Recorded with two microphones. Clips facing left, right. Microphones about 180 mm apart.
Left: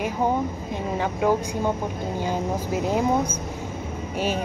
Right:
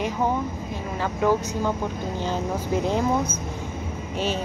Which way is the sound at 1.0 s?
15° left (ahead or behind).